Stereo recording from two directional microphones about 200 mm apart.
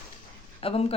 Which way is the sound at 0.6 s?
30° left (ahead or behind).